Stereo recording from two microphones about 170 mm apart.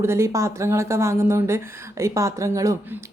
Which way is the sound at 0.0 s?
15° right (ahead or behind).